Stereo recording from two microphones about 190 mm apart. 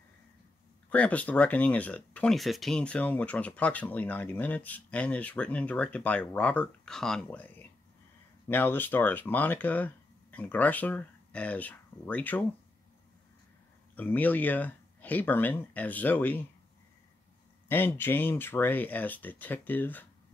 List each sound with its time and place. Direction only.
0.8 s speech: 5° left (ahead or behind)
13.9 s speech: 10° left (ahead or behind)
17.6 s speech: 10° left (ahead or behind)